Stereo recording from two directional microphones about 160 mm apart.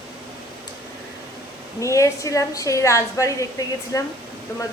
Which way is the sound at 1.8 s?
20° left (ahead or behind).